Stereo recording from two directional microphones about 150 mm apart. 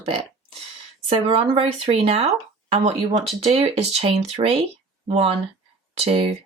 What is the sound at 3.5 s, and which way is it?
Speech, 40° right (ahead or behind).